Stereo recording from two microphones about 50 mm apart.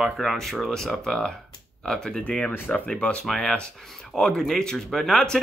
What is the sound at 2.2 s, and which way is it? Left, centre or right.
Speech, left.